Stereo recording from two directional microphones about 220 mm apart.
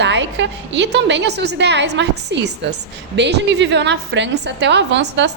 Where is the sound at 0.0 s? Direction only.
55° right (ahead or behind).